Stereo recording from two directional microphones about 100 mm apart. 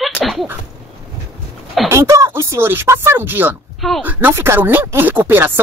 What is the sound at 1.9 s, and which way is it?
Speech, 30° right (ahead or behind).